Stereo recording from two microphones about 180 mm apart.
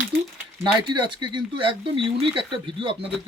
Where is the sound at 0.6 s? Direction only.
25° right (ahead or behind).